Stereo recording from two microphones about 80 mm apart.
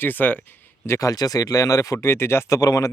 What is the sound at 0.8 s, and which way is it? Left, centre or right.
Speech, left.